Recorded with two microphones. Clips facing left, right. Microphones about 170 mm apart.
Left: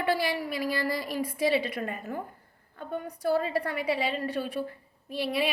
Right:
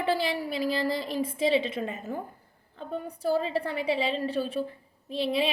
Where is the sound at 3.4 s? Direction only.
25° right (ahead or behind).